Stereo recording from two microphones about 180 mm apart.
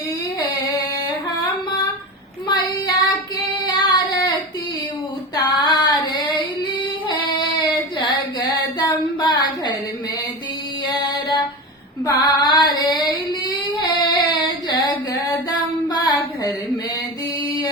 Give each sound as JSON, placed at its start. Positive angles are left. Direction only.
{"t": 2.5, "sound": "child singing", "side_deg": 20}
{"t": 3.7, "sound": "female singing", "side_deg": 20}
{"t": 5.3, "sound": "female singing", "side_deg": 25}
{"t": 7.9, "sound": "a sound", "side_deg": 25}
{"t": 10.8, "sound": "music", "side_deg": 25}
{"t": 12.0, "sound": "female singing", "side_deg": 25}
{"t": 13.7, "sound": "child singing", "side_deg": 25}
{"t": 15.4, "sound": "a sound", "side_deg": 20}